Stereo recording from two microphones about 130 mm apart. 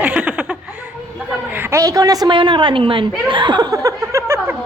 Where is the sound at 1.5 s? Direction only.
20° right (ahead or behind).